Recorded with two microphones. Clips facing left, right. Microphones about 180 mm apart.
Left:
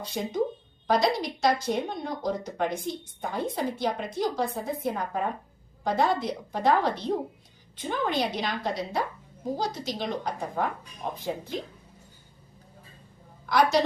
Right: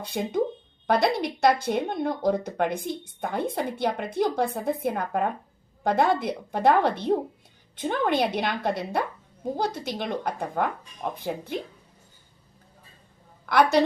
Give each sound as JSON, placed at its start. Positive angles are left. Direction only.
{"t": 0.0, "sound": "speech", "side_deg": -55}
{"t": 13.4, "sound": "a woman's voice", "side_deg": -55}